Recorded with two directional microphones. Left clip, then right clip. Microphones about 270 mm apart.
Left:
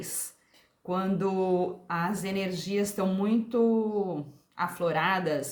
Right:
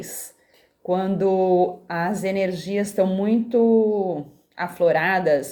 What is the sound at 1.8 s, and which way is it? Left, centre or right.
Speech, left.